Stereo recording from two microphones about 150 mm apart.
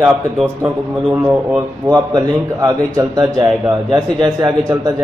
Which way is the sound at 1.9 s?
25° right (ahead or behind).